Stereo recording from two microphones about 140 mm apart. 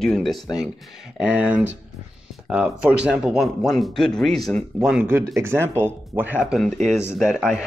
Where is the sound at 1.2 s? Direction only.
10° right (ahead or behind).